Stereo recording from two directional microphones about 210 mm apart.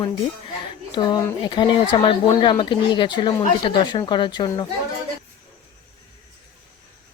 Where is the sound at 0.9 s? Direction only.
20° left (ahead or behind).